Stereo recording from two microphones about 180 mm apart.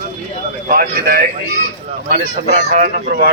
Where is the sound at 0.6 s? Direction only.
55° right (ahead or behind).